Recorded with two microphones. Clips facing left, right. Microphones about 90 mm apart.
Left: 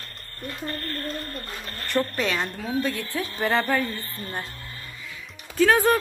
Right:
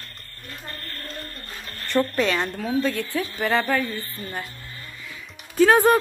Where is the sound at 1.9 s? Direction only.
Centre (ahead or behind).